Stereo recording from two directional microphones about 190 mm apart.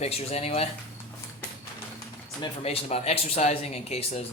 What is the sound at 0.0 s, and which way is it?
Speech, 35° left (ahead or behind).